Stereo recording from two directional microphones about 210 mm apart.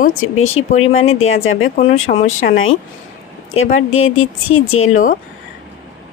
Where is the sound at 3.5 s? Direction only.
75° left (ahead or behind).